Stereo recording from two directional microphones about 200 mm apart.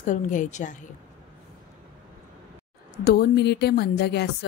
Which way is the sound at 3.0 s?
50° left (ahead or behind).